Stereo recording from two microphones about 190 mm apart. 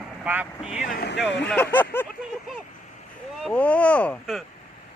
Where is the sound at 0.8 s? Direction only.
55° left (ahead or behind).